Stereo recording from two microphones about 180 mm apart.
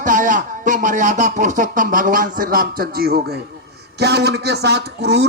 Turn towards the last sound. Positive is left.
turn(degrees=-70)  # may be behind; listen again after turning